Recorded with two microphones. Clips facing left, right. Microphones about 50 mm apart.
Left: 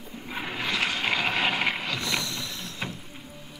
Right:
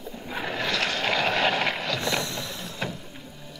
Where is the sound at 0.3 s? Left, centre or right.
Centre.